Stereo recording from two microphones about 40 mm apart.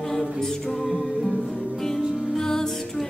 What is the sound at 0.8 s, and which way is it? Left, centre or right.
Music, centre.